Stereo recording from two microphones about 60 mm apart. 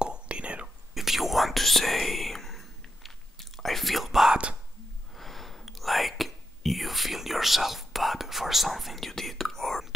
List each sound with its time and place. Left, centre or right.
0.0 s whispering: centre
0.9 s whispering: centre